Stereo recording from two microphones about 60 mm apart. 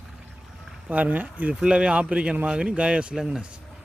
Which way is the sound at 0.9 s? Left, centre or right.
Right.